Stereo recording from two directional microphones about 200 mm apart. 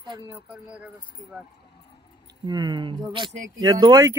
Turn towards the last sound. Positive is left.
turn(degrees=-20)  # may be behind; listen again after turning